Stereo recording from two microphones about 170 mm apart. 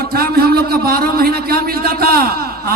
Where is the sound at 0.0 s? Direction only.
65° right (ahead or behind).